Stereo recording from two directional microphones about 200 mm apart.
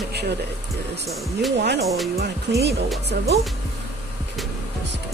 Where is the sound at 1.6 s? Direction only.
55° right (ahead or behind).